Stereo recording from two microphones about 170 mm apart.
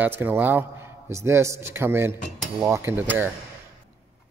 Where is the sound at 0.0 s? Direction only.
10° right (ahead or behind).